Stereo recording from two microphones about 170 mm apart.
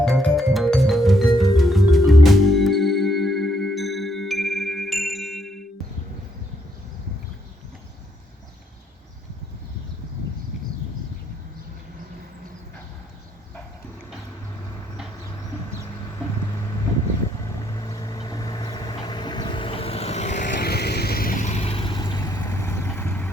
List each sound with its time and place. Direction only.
0.0 s music: centre (ahead or behind)
17.7 s vehicle: 20° left (ahead or behind); by 20.6 s 45° left (ahead or behind)
20.6 s vehicle: 70° left (ahead or behind); by 23.3 s 10° left (ahead or behind)